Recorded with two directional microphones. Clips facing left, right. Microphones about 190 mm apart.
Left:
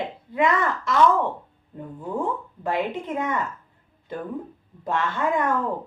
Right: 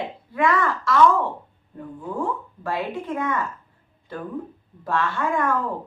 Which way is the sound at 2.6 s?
20° left (ahead or behind).